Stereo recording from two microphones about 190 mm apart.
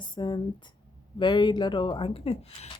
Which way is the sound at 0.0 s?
25° left (ahead or behind).